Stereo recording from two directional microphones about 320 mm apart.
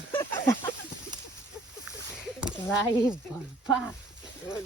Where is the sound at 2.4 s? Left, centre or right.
Centre.